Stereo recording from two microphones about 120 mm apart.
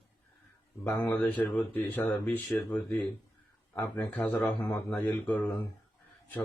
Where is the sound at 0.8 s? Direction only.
20° left (ahead or behind).